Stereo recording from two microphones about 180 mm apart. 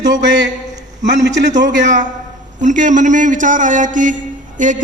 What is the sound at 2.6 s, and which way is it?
A man's voice, 45° right (ahead or behind).